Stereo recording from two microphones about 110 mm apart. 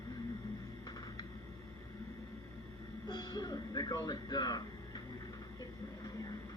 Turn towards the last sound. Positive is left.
turn(degrees=35)  # may be behind; listen again after turning